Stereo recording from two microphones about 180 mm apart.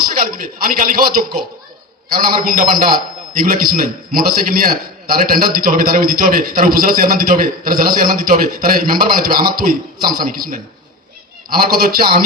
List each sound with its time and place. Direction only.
0.0 s a man's voice: 55° right (ahead or behind)